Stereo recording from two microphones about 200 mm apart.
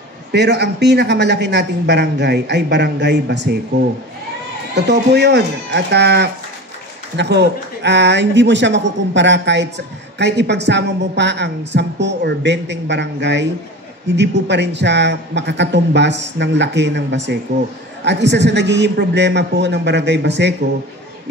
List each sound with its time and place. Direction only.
0.3 s speech: 55° right (ahead or behind)
4.7 s speech: 55° right (ahead or behind)